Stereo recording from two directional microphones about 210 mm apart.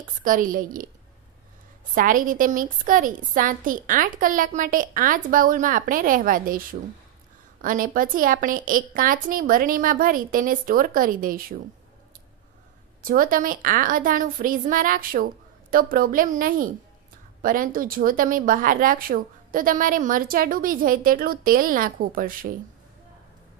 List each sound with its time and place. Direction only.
0.0 s a woman's voice: 40° right (ahead or behind)
2.0 s a woman's voice: 40° right (ahead or behind)
13.0 s a woman's voice: 40° right (ahead or behind)